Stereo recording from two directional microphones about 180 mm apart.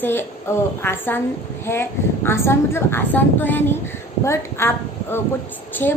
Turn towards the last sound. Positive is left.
turn(degrees=10)  # may be behind; listen again after turning